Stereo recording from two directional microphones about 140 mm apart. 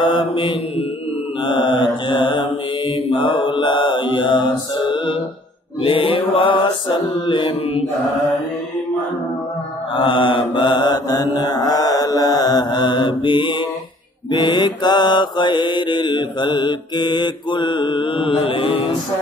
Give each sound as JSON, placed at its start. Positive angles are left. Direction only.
{"t": 0.0, "sound": "mantra", "side_deg": 35}
{"t": 9.9, "sound": "mantra", "side_deg": 35}